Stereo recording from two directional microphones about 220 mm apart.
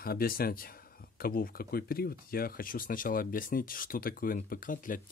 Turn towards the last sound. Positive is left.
turn(degrees=40)  # may be behind; listen again after turning